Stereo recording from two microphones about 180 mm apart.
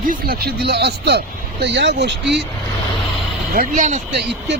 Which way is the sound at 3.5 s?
50° right (ahead or behind).